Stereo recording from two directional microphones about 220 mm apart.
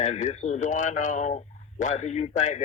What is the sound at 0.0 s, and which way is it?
A man's voice, 35° left (ahead or behind).